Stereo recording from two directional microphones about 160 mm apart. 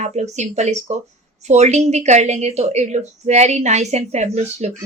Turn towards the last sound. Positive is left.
turn(degrees=-45)  # may be behind; listen again after turning